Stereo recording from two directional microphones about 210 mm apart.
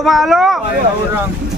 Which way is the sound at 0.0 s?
Centre (ahead or behind).